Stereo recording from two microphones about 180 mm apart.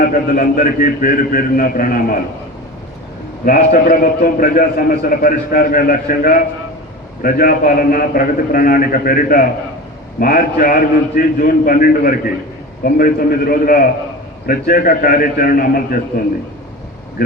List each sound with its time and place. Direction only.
0.0 s a man's voice: 50° left (ahead or behind)
3.4 s a man's voice: 50° left (ahead or behind)
17.2 s speech: 60° left (ahead or behind)